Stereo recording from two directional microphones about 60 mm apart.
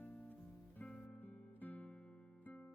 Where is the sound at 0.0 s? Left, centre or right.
Left.